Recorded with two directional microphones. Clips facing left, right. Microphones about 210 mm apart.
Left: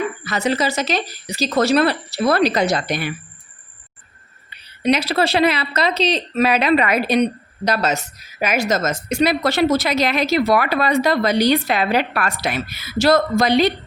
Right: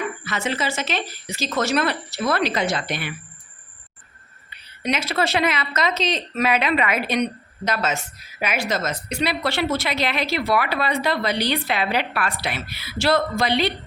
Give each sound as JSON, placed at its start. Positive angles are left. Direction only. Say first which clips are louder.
{"t": 0.3, "sound": "a woman's voice", "louder": "left 6 dB", "side_deg": 40}
{"t": 4.8, "sound": "speech", "louder": "left 6 dB", "side_deg": 35}